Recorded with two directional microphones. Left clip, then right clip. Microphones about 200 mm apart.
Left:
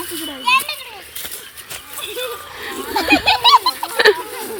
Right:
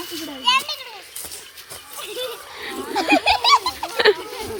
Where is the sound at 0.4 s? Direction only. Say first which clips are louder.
Left 3 dB; 10° left (ahead or behind).